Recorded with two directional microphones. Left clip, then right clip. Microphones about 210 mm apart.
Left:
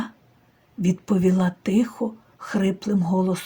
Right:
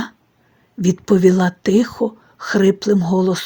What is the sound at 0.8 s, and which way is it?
Speech, 35° right (ahead or behind).